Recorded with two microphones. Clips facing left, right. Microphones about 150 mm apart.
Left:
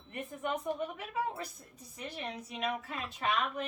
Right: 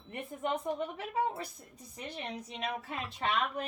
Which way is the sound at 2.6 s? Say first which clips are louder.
Left 2 dB; 30° right (ahead or behind).